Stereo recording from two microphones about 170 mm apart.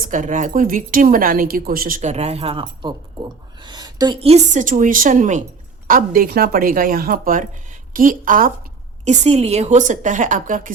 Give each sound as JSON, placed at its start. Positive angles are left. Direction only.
{"t": 0.0, "sound": "a woman's voice", "side_deg": -50}
{"t": 4.2, "sound": "a woman's voice", "side_deg": -40}
{"t": 9.0, "sound": "a woman's voice", "side_deg": -40}